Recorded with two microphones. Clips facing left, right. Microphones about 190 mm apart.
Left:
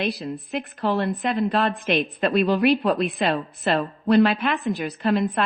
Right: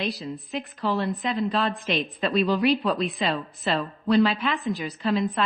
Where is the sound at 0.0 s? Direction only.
60° left (ahead or behind).